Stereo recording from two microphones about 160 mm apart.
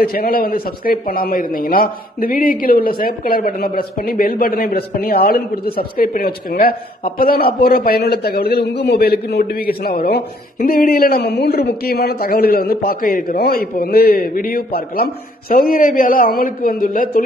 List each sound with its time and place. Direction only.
0.0 s a man's voice: 70° left (ahead or behind)